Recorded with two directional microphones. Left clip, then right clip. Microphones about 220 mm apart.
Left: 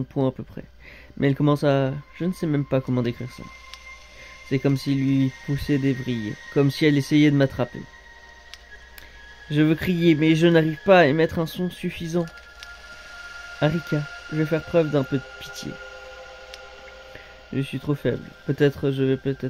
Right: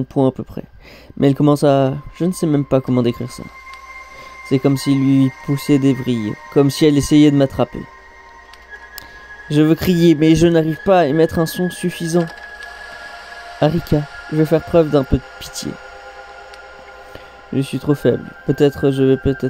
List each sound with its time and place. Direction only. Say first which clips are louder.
0.1 s speech: right 9 dB; 25° right (ahead or behind)
4.5 s speech: right 8 dB; 20° right (ahead or behind)
9.5 s speech: right 7 dB; 25° right (ahead or behind)
13.6 s speech: right 8 dB; 25° right (ahead or behind)
17.6 s speech: right 9 dB; 25° right (ahead or behind)